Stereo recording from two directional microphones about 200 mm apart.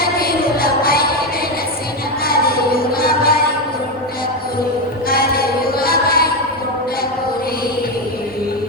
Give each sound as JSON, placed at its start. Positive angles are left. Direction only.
{"t": 0.0, "sound": "music", "side_deg": 50}
{"t": 2.2, "sound": "music", "side_deg": 50}
{"t": 5.0, "sound": "music", "side_deg": 50}